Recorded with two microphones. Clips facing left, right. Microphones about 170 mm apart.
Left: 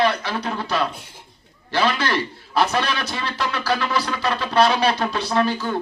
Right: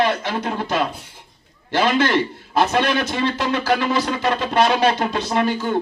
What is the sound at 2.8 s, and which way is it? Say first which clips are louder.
Speech: right 5 dB; 50° right (ahead or behind).